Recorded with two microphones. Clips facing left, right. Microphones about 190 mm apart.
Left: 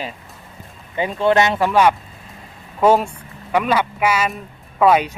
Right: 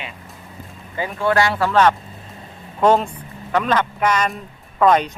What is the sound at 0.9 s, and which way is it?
Speech, 20° left (ahead or behind).